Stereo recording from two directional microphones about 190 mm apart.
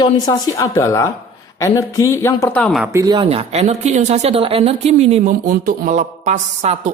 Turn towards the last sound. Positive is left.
turn(degrees=-40)  # may be behind; listen again after turning